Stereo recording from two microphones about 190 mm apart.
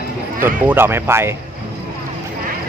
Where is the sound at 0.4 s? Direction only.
10° right (ahead or behind).